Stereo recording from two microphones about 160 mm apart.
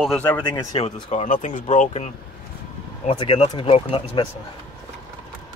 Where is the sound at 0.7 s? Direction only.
40° left (ahead or behind).